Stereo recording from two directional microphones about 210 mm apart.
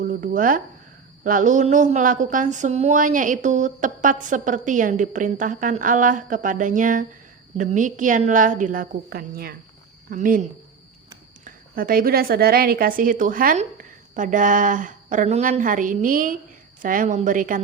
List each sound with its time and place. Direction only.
0.0 s speech: 40° right (ahead or behind)
11.4 s speech: 45° right (ahead or behind)